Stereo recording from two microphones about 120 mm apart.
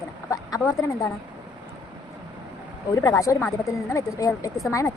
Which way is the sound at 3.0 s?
25° left (ahead or behind).